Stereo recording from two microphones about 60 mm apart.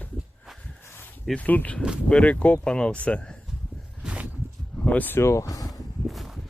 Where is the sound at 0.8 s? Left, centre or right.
Left.